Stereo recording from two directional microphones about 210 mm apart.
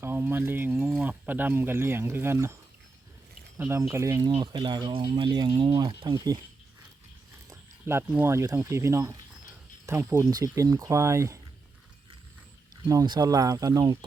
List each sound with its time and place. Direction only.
0.0 s speech: 10° right (ahead or behind)
3.6 s speech: 10° right (ahead or behind)
7.5 s speech: 10° right (ahead or behind)
12.9 s speech: 15° right (ahead or behind)